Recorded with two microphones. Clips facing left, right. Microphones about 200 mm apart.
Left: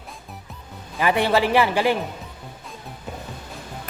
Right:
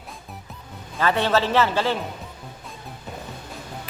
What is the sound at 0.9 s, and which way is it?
A man's voice, 15° left (ahead or behind).